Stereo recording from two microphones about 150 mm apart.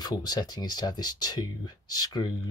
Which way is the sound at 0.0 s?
25° left (ahead or behind).